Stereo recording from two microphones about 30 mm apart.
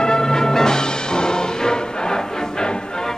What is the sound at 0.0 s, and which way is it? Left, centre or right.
Music, left.